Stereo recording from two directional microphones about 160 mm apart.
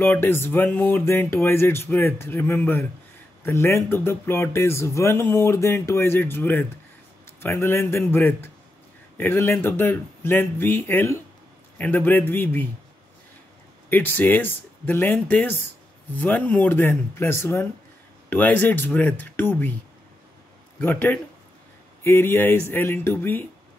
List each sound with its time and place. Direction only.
0.0 s speech: 15° left (ahead or behind)
13.8 s speech: 10° left (ahead or behind)
20.8 s speech: 10° left (ahead or behind)